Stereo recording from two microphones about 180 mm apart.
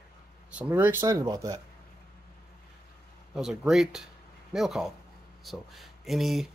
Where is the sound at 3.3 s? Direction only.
Centre (ahead or behind).